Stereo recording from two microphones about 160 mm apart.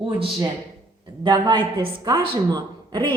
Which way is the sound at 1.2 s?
30° right (ahead or behind).